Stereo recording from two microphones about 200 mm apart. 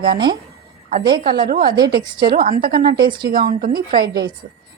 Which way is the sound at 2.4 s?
45° right (ahead or behind).